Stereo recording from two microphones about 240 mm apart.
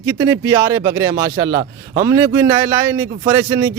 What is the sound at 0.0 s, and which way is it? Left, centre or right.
A man's voice, centre.